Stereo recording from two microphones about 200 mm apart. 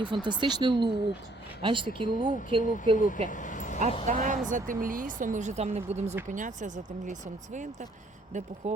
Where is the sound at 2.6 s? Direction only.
40° left (ahead or behind).